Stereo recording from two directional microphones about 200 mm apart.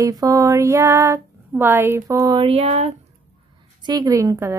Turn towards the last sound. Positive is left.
turn(degrees=-15)  # may be behind; listen again after turning